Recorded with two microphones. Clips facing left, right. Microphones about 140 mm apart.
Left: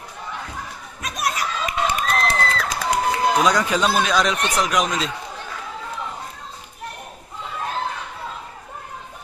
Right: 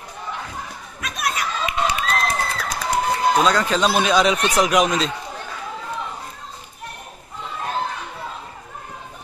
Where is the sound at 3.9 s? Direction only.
5° right (ahead or behind).